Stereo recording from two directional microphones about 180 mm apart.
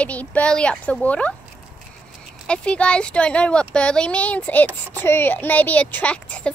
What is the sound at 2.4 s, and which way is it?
A woman's voice, 5° left (ahead or behind).